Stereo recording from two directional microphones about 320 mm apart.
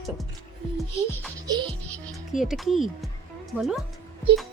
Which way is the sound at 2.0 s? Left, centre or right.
Centre.